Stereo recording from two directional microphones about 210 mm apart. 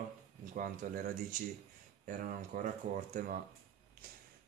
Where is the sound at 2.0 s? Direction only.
40° right (ahead or behind).